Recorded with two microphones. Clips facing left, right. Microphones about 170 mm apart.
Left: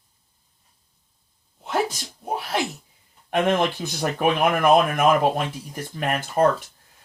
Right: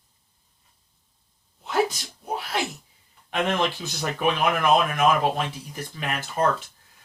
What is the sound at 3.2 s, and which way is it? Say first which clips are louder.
Speech: left 4 dB; 50° left (ahead or behind).